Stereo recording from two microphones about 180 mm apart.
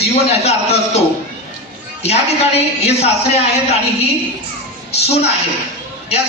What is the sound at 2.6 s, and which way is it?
Speech, 35° left (ahead or behind).